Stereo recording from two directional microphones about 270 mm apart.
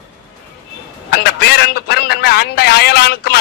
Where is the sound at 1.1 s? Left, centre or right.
Left.